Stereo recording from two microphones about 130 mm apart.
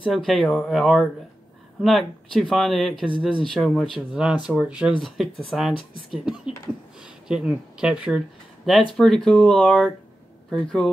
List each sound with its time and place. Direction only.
0.0 s speech: centre (ahead or behind)